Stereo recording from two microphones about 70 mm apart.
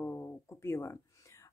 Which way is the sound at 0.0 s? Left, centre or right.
Left.